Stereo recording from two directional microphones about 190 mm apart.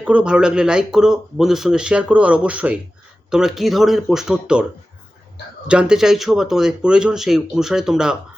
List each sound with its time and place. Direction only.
0.0 s speech: 5° right (ahead or behind)
5.6 s speech: 5° right (ahead or behind)